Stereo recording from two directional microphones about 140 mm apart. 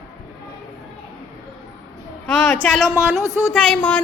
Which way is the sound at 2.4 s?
10° left (ahead or behind).